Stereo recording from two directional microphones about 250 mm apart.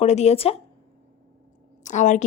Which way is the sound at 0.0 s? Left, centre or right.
Left.